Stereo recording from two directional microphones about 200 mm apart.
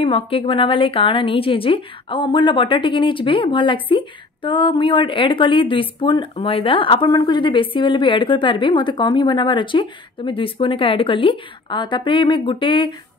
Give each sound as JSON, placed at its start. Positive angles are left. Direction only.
{"t": 0.0, "sound": "a woman's voice", "side_deg": 25}